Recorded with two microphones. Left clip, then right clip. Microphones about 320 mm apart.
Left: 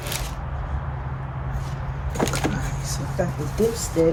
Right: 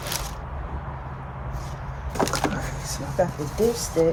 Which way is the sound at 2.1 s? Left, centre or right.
Centre.